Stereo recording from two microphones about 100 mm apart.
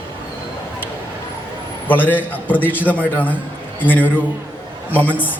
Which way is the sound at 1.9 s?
20° left (ahead or behind).